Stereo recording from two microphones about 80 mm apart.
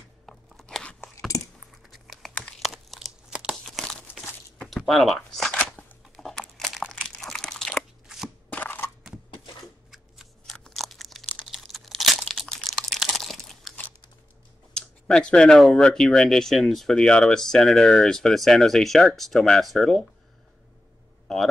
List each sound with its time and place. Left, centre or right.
0.3 s crunch: centre
1.3 s a sound: left
1.9 s typing: centre
2.6 s crumpling: centre
3.6 s crumpling: centre
4.6 s a sound: centre
6.1 s crumpling: centre
8.5 s a sound: left
10.4 s crunch: centre
14.8 s speech: centre